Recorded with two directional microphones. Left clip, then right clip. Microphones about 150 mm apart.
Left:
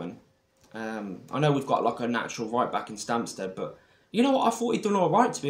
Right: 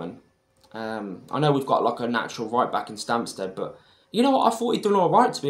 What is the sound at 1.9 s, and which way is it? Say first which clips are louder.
Speech: right 3 dB; 35° left (ahead or behind).